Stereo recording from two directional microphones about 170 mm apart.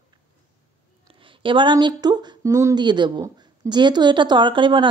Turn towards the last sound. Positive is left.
turn(degrees=-30)  # may be behind; listen again after turning